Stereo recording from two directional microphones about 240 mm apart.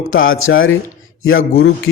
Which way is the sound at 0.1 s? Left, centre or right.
Left.